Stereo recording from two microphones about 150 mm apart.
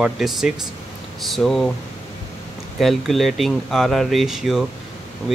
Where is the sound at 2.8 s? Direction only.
Centre (ahead or behind).